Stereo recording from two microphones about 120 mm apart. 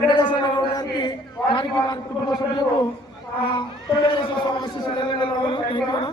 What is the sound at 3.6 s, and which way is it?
A man's voice, 40° left (ahead or behind).